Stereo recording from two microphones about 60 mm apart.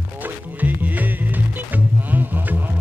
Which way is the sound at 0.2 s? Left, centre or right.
Right.